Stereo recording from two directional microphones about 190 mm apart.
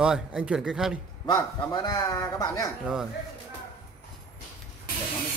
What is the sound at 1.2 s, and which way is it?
A man's voice, 20° left (ahead or behind).